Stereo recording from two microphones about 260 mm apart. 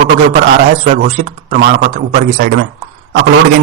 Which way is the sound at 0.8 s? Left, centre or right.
Right.